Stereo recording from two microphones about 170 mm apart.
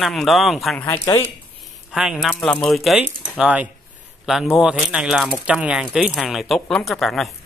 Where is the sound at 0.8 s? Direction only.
15° left (ahead or behind).